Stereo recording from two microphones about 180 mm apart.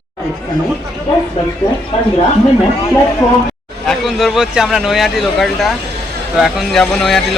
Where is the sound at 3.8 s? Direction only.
Centre (ahead or behind).